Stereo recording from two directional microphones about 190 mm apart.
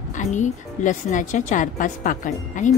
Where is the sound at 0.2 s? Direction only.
40° left (ahead or behind).